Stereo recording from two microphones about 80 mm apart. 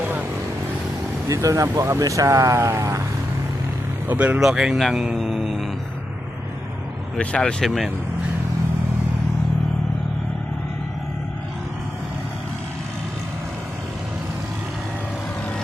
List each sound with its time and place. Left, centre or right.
1.3 s speech: right
4.1 s speech: right
4.4 s speech: centre
4.8 s speech: centre
5.1 s mantra: centre
7.2 s speech: centre
7.6 s speech: centre